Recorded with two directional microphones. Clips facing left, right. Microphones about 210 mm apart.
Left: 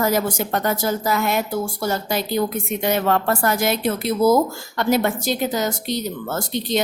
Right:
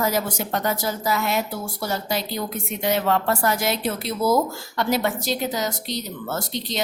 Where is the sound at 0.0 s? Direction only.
50° left (ahead or behind).